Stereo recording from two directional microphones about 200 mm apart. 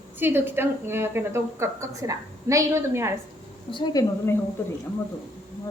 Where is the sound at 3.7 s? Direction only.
25° left (ahead or behind).